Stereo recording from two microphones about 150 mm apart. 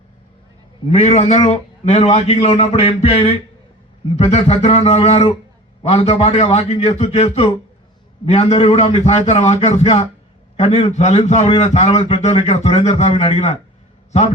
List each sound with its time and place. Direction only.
0.9 s a man's voice: 50° left (ahead or behind)